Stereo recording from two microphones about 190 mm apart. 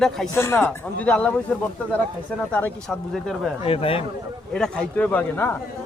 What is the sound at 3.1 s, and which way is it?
Speech, centre (ahead or behind).